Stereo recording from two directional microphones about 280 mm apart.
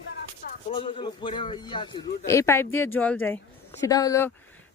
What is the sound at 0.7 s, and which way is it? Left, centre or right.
A man's voice, centre.